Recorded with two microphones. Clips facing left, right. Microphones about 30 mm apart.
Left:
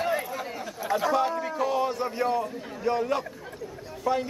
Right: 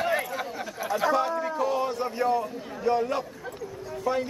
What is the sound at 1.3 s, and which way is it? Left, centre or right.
A man's voice, centre.